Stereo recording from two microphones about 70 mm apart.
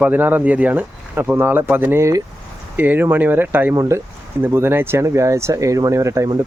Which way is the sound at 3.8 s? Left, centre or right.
Right.